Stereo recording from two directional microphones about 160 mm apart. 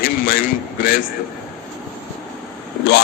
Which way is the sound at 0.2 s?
65° left (ahead or behind).